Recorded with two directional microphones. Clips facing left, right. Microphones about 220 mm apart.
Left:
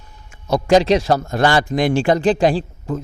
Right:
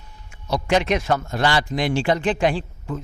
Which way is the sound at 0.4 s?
50° left (ahead or behind).